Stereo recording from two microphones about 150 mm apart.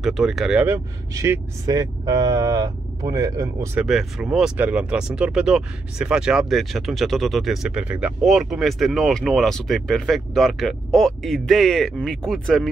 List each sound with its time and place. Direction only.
0.0 s speech: centre (ahead or behind)
0.7 s speech: 20° right (ahead or behind)
3.7 s speech: 5° right (ahead or behind)